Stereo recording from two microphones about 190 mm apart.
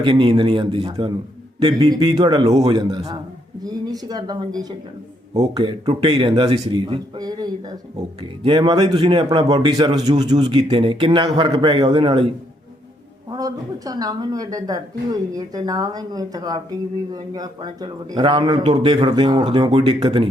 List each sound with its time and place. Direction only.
0.0 s speech: 25° right (ahead or behind)
13.3 s speech: 20° right (ahead or behind)